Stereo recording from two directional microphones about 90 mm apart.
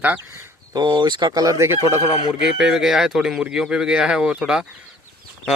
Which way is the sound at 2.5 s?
5° right (ahead or behind).